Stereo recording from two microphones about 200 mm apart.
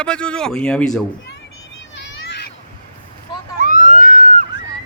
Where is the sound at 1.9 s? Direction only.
60° left (ahead or behind).